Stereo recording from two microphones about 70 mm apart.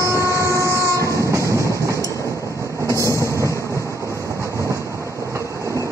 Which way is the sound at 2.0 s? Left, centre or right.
Left.